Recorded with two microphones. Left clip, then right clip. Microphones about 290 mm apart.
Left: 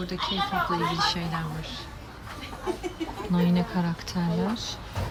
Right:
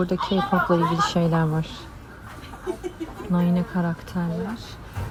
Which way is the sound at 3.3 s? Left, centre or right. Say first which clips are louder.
Right 2 dB; centre.